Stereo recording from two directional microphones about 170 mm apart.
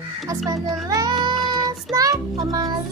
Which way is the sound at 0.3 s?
20° right (ahead or behind).